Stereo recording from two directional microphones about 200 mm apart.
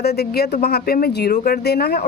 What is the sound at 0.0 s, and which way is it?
Speech, 55° left (ahead or behind).